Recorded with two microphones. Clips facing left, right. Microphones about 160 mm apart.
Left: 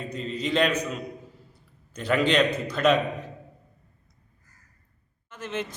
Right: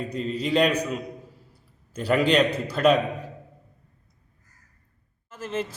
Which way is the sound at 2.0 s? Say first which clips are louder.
Right 2 dB; 5° right (ahead or behind).